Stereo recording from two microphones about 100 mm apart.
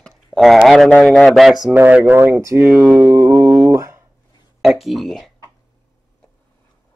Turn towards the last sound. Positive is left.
turn(degrees=0)  # may be behind; listen again after turning